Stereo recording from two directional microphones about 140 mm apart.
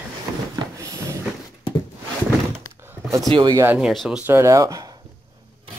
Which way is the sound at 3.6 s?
10° right (ahead or behind).